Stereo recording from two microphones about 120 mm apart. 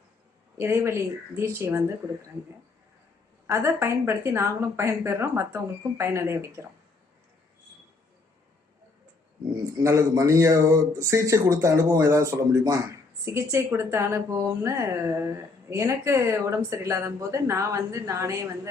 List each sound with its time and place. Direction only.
0.5 s a man's voice: 20° right (ahead or behind)
3.4 s a man's voice: 25° right (ahead or behind)
9.8 s a man's voice: 25° right (ahead or behind)